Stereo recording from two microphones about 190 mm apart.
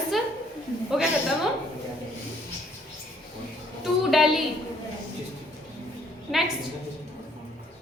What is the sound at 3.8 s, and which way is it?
Speech, centre (ahead or behind).